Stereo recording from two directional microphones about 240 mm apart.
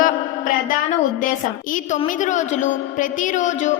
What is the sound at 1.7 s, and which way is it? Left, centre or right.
A woman's voice, left.